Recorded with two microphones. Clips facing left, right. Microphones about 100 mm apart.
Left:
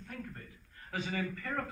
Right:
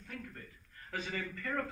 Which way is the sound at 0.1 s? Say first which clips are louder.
Left 1 dB; 35° left (ahead or behind).